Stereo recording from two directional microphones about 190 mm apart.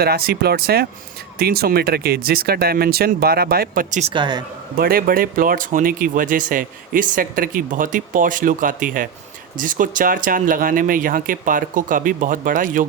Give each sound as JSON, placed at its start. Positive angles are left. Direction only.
{"t": 0.0, "sound": "speech", "side_deg": -55}
{"t": 4.1, "sound": "a man's voice", "side_deg": -25}
{"t": 4.8, "sound": "speech", "side_deg": -50}